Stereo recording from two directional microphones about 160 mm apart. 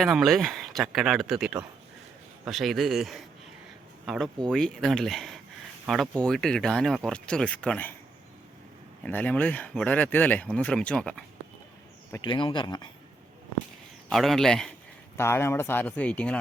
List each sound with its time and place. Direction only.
0.0 s speech: centre (ahead or behind)
9.0 s speech: 10° left (ahead or behind)
12.2 s speech: 30° left (ahead or behind)
14.1 s speech: centre (ahead or behind)
15.2 s speech: 15° left (ahead or behind)